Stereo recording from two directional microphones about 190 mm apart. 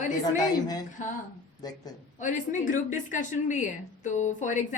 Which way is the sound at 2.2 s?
40° left (ahead or behind).